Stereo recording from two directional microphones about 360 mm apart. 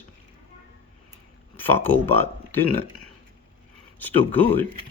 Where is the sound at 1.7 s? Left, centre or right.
Centre.